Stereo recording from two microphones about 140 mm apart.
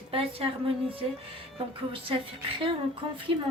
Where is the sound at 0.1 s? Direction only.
40° right (ahead or behind).